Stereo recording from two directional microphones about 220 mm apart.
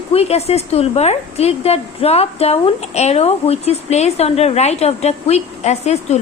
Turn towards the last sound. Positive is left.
turn(degrees=30)  # may be behind; listen again after turning